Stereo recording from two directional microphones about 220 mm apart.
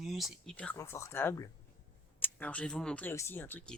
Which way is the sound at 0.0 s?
Centre (ahead or behind).